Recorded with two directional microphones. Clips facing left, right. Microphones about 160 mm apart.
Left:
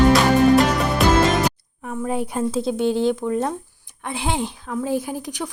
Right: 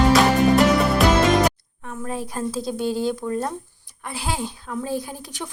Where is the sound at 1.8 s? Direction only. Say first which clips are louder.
Left 5 dB; 10° left (ahead or behind).